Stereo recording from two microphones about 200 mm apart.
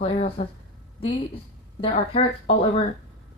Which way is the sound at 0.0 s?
30° left (ahead or behind).